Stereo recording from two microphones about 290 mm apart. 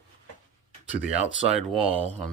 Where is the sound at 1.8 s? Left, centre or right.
Centre.